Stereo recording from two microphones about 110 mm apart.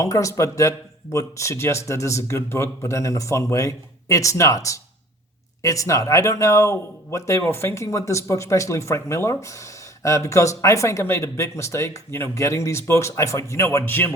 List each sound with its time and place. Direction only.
0.0 s speech: 30° left (ahead or behind)